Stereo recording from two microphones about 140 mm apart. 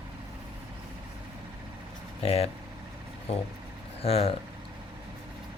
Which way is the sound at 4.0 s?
45° left (ahead or behind).